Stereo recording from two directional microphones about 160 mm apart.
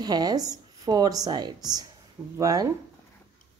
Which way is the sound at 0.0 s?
25° right (ahead or behind).